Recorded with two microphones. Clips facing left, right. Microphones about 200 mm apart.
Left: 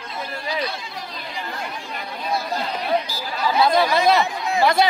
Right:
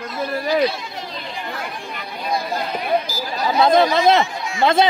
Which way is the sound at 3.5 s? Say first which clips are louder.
Right 3 dB; 20° right (ahead or behind).